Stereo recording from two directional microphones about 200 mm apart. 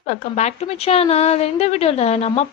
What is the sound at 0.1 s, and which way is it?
A woman's voice, 35° left (ahead or behind).